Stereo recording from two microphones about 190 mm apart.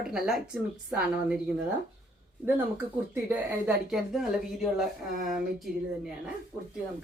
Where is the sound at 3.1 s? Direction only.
10° right (ahead or behind).